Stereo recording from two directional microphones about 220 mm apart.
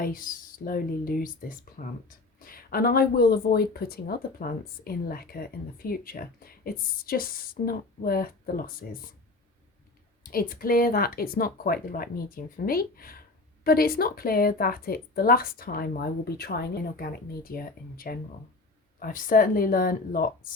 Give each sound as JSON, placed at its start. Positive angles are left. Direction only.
{"t": 0.0, "sound": "speech", "side_deg": 40}
{"t": 10.2, "sound": "speech", "side_deg": 40}